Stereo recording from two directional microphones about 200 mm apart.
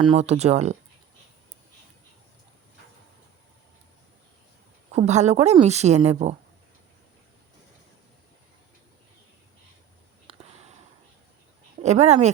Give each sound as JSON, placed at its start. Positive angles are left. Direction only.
{"t": 0.0, "sound": "a woman's voice", "side_deg": -30}
{"t": 4.9, "sound": "a woman's voice", "side_deg": -35}
{"t": 11.8, "sound": "a woman's voice", "side_deg": -35}